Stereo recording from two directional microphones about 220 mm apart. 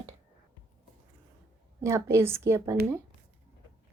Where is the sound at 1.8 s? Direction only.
10° right (ahead or behind).